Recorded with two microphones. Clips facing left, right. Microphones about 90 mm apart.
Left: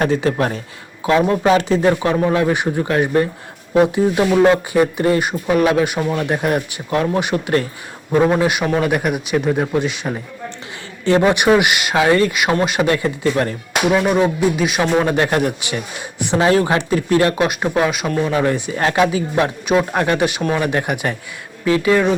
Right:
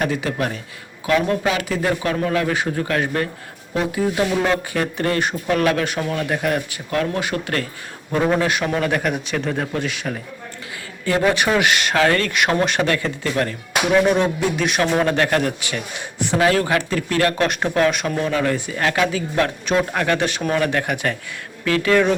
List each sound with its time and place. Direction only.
0.0 s a man's voice: 35° left (ahead or behind); by 6.1 s 15° left (ahead or behind)
6.1 s speech: 25° left (ahead or behind); by 12.9 s 10° left (ahead or behind)
12.9 s speech: 20° left (ahead or behind)
14.0 s speech: 5° left (ahead or behind); by 17.3 s 20° left (ahead or behind)
17.3 s speech: 10° left (ahead or behind); by 19.1 s 30° left (ahead or behind)
19.1 s speech: 15° left (ahead or behind)
20.1 s speech: 15° left (ahead or behind)